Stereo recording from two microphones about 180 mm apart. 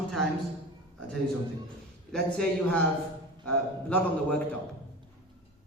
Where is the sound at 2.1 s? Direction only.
5° left (ahead or behind).